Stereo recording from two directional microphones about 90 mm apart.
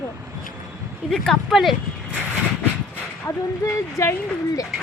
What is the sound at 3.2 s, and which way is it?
Speech, 35° left (ahead or behind).